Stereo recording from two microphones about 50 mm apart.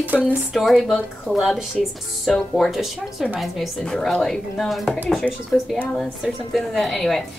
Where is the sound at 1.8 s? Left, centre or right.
Centre.